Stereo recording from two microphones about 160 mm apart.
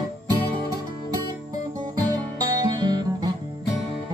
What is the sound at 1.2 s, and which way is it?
Music, 25° right (ahead or behind).